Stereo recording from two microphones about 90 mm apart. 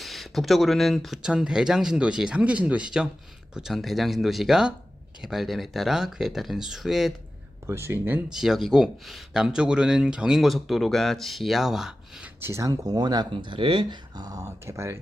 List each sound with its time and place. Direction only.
0.0 s speech: centre (ahead or behind)
7.7 s speech: 30° right (ahead or behind)
8.3 s speech: 5° right (ahead or behind)
12.4 s speech: 30° right (ahead or behind); by 13.2 s 50° right (ahead or behind)
13.3 s speech: 70° right (ahead or behind)
14.2 s speech: 40° right (ahead or behind)